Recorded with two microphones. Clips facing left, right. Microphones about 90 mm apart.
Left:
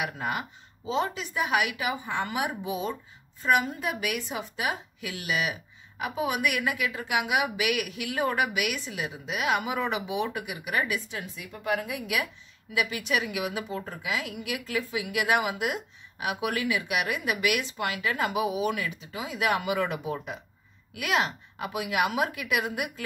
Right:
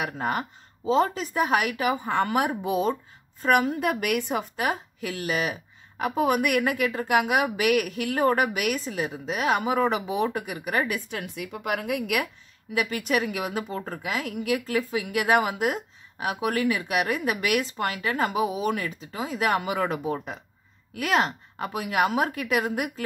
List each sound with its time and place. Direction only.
0.0 s a woman's voice: 40° right (ahead or behind)
11.1 s speech: 60° right (ahead or behind)
12.7 s a woman's voice: 45° right (ahead or behind)